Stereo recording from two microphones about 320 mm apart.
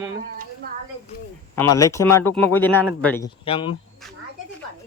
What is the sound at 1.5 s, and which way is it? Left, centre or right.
Speech, centre.